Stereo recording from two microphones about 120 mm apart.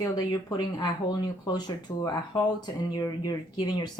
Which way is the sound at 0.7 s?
35° left (ahead or behind).